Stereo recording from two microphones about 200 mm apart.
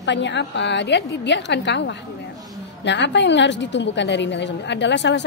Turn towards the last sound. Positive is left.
turn(degrees=65)  # may be behind; listen again after turning